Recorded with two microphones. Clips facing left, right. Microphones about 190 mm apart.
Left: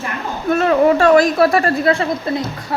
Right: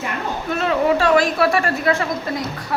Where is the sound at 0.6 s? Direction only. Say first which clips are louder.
Left 5 dB; 45° left (ahead or behind).